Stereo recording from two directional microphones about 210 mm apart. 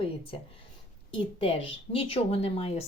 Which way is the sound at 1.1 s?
25° left (ahead or behind).